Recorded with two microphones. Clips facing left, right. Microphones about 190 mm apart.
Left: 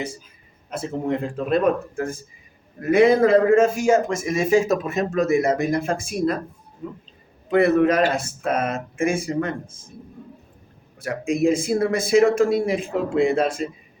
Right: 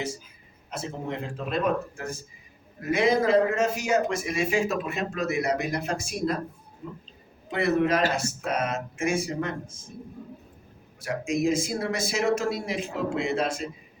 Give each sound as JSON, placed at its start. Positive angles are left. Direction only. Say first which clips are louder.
{"t": 1.5, "sound": "a man's voice", "louder": "left 6 dB", "side_deg": 55}
{"t": 7.5, "sound": "a man's voice", "louder": "left 7 dB", "side_deg": 55}
{"t": 11.0, "sound": "a man's voice", "louder": "left 5 dB", "side_deg": 55}